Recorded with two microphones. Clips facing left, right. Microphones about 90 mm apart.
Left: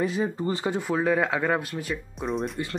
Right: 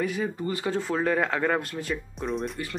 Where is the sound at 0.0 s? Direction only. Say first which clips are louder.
Left 2 dB; 30° left (ahead or behind).